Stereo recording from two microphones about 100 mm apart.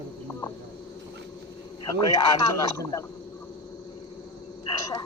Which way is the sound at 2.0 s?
45° left (ahead or behind).